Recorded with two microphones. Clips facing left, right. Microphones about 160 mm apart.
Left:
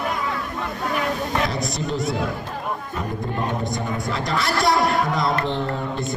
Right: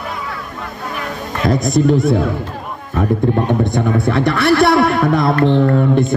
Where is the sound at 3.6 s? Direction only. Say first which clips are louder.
Right 10 dB; 60° right (ahead or behind).